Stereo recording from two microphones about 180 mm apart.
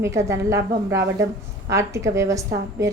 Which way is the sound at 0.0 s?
15° right (ahead or behind).